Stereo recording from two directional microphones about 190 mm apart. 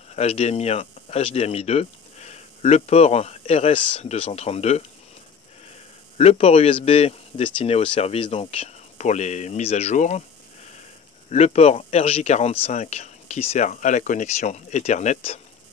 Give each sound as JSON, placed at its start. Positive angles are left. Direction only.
{"t": 0.1, "sound": "speech", "side_deg": 35}
{"t": 6.1, "sound": "speech", "side_deg": 30}